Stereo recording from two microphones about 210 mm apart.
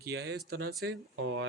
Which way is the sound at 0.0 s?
50° right (ahead or behind).